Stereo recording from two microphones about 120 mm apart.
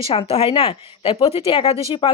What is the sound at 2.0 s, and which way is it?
Speech, 45° left (ahead or behind).